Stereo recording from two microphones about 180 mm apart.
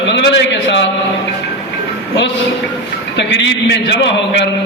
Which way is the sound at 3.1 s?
80° left.